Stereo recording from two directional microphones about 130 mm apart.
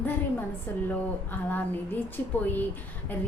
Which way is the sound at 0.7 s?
15° left (ahead or behind).